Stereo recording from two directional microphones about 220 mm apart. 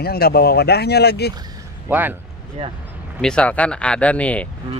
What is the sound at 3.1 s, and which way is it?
Speech, 5° left (ahead or behind).